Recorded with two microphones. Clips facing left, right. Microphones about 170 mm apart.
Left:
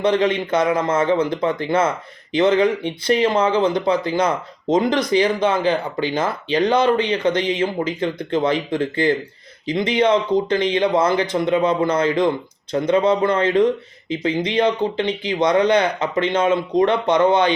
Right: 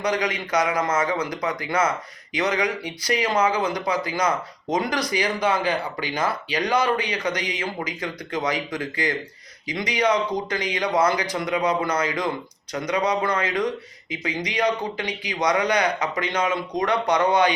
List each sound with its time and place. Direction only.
0.0 s speech: 25° left (ahead or behind)